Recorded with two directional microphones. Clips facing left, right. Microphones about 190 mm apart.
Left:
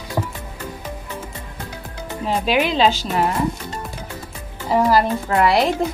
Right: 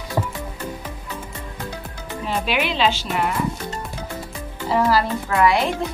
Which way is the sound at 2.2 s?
40° left (ahead or behind).